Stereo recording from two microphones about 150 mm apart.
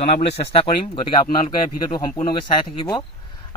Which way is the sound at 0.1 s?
35° left (ahead or behind).